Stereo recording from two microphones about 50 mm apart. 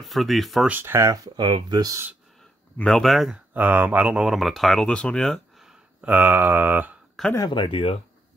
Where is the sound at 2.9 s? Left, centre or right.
Centre.